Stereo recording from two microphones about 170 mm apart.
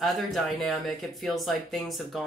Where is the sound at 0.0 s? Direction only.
Centre (ahead or behind).